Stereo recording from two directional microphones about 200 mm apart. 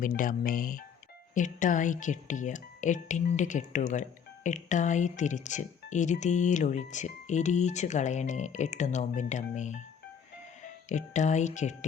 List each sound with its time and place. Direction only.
0.0 s speech: 40° left (ahead or behind)
10.8 s speech: 35° left (ahead or behind)